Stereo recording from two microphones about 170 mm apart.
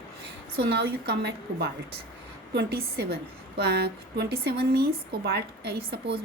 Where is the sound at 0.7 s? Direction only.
80° right.